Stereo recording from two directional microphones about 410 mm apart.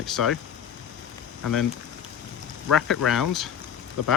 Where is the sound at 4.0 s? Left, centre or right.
Left.